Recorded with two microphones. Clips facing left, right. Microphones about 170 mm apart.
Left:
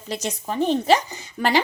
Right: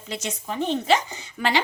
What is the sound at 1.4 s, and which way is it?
Speech, 40° left (ahead or behind).